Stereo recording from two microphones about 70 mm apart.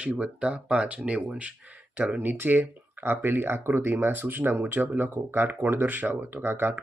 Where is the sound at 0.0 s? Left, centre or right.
Centre.